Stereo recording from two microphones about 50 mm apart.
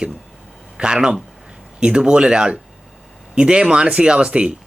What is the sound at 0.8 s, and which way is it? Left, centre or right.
Speech, centre.